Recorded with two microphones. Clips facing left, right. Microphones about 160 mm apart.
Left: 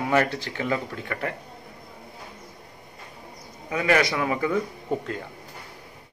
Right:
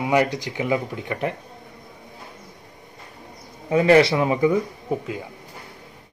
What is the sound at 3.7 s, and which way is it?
Speech, 30° right (ahead or behind).